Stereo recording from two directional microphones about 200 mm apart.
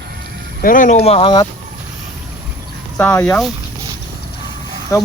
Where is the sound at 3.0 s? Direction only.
10° left (ahead or behind).